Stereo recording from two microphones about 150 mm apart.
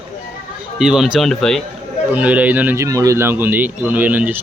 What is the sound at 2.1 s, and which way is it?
Speech, 10° right (ahead or behind).